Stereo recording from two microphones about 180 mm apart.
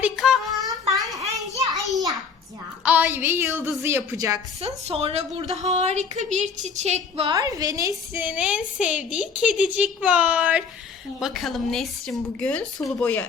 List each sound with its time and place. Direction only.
0.0 s child singing: centre (ahead or behind)
0.9 s a sound: centre (ahead or behind)
2.8 s a woman's voice: 10° right (ahead or behind)
4.6 s a woman's voice: 35° right (ahead or behind)
7.3 s a woman's voice: 20° right (ahead or behind); by 13.2 s 5° left (ahead or behind)